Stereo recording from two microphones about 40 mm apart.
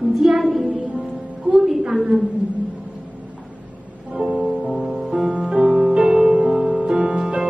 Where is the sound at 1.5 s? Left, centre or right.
Centre.